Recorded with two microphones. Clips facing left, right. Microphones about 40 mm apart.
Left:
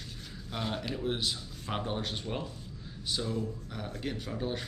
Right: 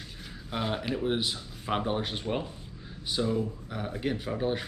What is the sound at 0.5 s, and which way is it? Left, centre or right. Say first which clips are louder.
Speech: right 4 dB; centre.